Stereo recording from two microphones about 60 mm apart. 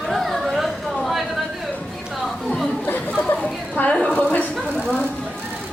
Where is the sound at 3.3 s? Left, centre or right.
Left.